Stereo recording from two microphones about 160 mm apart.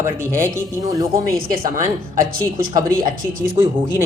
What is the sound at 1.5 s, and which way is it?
Speech, 60° right (ahead or behind).